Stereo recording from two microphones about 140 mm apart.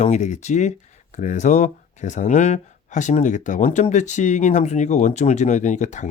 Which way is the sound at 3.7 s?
50° left (ahead or behind).